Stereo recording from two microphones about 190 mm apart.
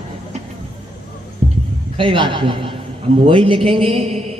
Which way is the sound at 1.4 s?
30° right (ahead or behind).